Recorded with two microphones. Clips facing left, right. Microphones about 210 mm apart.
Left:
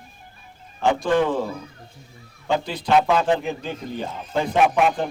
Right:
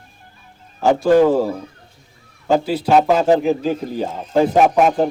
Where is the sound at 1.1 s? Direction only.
40° right (ahead or behind).